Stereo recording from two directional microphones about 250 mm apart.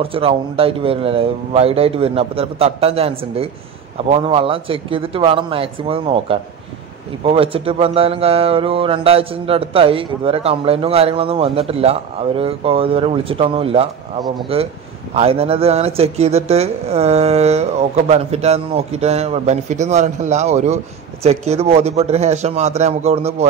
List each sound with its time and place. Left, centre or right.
0.0 s speech: right